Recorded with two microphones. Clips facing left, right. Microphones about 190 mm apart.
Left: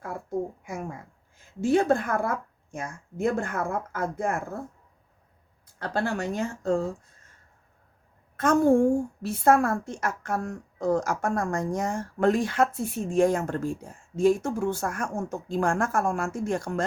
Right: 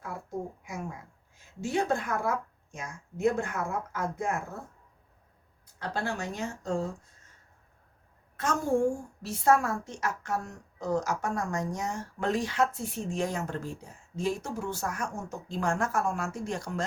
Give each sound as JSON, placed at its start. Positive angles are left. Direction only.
{"t": 1.6, "sound": "a woman's voice", "side_deg": 55}
{"t": 5.8, "sound": "speech", "side_deg": 55}
{"t": 8.4, "sound": "a woman's voice", "side_deg": 55}